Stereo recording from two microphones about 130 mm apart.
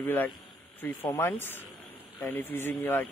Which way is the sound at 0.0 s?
15° left (ahead or behind).